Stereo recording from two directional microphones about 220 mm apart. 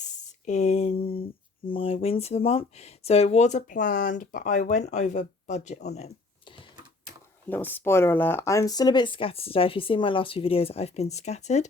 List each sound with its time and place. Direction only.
0.0 s a sound: 30° left (ahead or behind)
1.6 s speech: 25° left (ahead or behind)
7.7 s speech: 10° left (ahead or behind); by 11.7 s 30° left (ahead or behind)